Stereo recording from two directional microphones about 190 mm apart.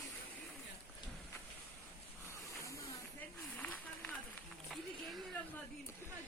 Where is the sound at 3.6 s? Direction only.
5° left (ahead or behind).